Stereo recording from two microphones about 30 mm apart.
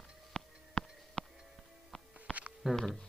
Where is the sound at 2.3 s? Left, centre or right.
Left.